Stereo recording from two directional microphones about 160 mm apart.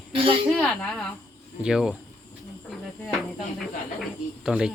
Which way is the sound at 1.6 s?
5° right (ahead or behind).